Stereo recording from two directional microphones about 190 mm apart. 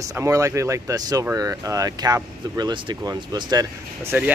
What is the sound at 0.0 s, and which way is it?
Speech, 15° right (ahead or behind).